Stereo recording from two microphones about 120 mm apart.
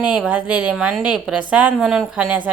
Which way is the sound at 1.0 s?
10° right (ahead or behind).